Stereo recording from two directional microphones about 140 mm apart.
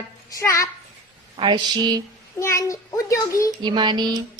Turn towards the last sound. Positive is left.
turn(degrees=-30)  # may be behind; listen again after turning